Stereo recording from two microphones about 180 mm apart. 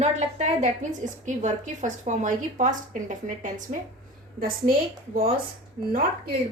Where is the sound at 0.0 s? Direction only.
40° right (ahead or behind).